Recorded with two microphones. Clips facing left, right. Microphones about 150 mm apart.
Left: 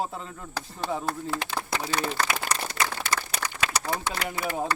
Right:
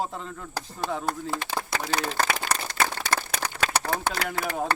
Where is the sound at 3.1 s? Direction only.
55° right (ahead or behind).